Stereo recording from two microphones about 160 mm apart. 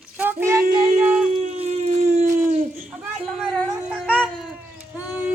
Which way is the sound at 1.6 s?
45° right (ahead or behind).